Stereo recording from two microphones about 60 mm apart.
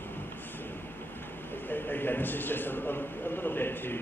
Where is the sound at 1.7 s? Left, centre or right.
Left.